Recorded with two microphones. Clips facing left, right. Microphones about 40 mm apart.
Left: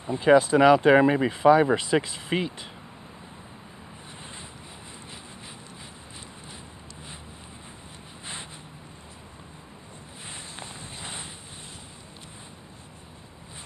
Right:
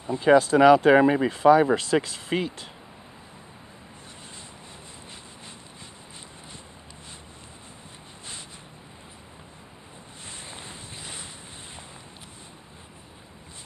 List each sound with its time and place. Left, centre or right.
0.2 s speech: centre
11.0 s boat: left